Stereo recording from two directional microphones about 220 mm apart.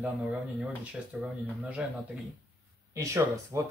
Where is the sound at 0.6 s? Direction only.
5° right (ahead or behind).